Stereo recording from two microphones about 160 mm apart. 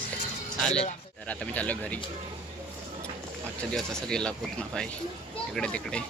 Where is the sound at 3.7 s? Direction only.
5° left (ahead or behind).